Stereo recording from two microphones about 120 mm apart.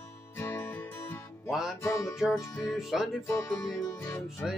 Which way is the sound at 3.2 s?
20° left (ahead or behind).